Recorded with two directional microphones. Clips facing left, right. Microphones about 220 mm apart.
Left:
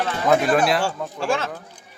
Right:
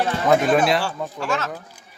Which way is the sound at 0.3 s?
Centre (ahead or behind).